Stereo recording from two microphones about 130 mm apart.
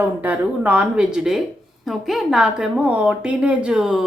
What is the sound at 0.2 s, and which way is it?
A woman's voice, 10° right (ahead or behind).